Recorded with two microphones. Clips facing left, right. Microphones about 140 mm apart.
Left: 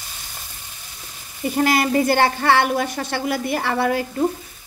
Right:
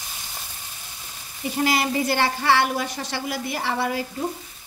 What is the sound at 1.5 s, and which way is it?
A woman's voice, 50° left (ahead or behind).